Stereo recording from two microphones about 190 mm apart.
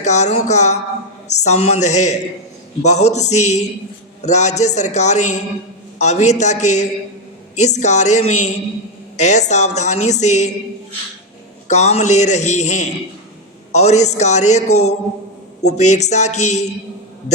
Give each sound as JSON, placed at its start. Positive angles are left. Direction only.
{"t": 0.0, "sound": "a woman's voice", "side_deg": 40}
{"t": 11.7, "sound": "a woman's voice", "side_deg": 35}